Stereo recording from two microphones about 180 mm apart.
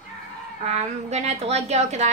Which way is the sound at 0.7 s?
40° right (ahead or behind).